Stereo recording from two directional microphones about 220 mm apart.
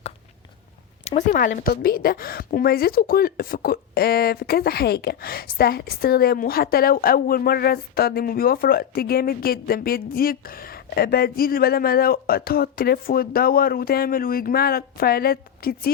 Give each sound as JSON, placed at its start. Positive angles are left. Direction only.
{"t": 1.0, "sound": "a woman's voice", "side_deg": 35}